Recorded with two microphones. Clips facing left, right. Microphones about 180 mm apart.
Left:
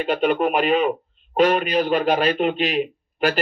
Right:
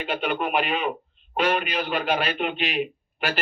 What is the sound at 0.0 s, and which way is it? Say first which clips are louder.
A man's voice: left 7 dB; 40° left (ahead or behind).